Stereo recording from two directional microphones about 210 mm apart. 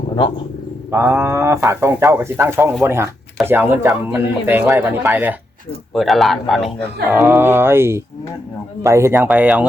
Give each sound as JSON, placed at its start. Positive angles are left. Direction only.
{"t": 0.9, "sound": "a man's voice", "side_deg": -10}
{"t": 7.2, "sound": "speech", "side_deg": -10}